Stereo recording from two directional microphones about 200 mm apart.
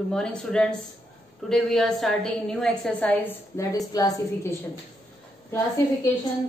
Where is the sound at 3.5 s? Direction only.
20° left (ahead or behind).